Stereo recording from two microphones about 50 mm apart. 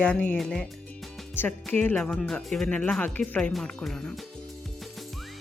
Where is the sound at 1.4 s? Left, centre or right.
Left.